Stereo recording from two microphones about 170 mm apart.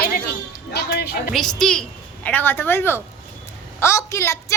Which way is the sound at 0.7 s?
70° left (ahead or behind).